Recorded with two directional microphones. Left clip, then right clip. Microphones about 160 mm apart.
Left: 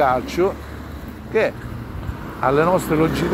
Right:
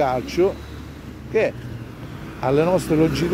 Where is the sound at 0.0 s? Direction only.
30° right (ahead or behind).